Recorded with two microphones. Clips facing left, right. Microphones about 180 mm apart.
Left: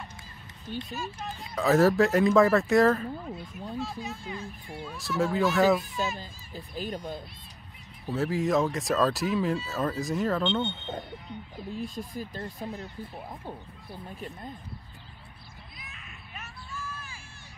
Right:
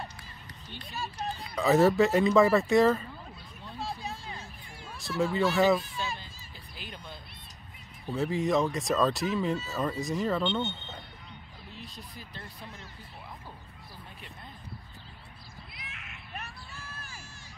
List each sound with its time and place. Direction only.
0.9 s speech: 35° right (ahead or behind)
1.5 s speech: centre (ahead or behind)
4.0 s speech: 35° right (ahead or behind)
4.9 s speech: centre (ahead or behind)
6.1 s speech: 40° left (ahead or behind)
8.1 s speech: centre (ahead or behind)
11.5 s speech: 50° left (ahead or behind)
15.7 s a sound: 80° right
16.3 s a sound: 35° right (ahead or behind)